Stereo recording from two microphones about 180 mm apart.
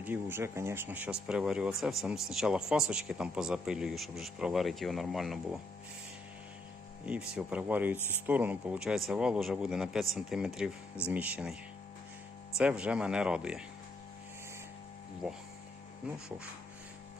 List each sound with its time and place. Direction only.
0.0 s speech: 10° right (ahead or behind)
7.3 s speech: 10° right (ahead or behind)
12.5 s speech: 5° right (ahead or behind)
15.2 s speech: 5° right (ahead or behind)